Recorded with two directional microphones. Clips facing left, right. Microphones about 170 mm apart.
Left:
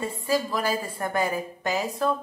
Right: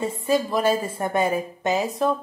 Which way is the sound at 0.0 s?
20° right (ahead or behind).